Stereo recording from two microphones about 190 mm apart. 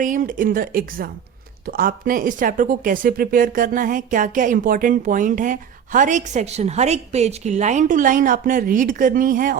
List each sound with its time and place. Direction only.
0.0 s speech: 45° right (ahead or behind)